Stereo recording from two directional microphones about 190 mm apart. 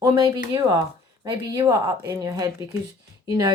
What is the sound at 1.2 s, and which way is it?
Speech, 15° right (ahead or behind).